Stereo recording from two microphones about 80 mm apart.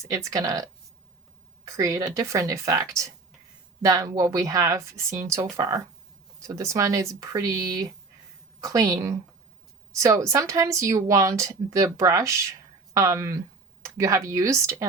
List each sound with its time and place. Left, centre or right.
0.0 s speech: right
1.6 s speech: right